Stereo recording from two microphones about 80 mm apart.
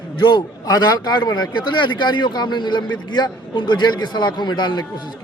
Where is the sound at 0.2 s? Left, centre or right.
Left.